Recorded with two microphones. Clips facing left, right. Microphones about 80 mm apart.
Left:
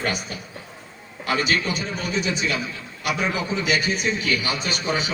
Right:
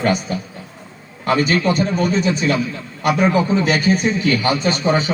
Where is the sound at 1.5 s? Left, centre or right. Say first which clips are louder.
Right 7 dB; right.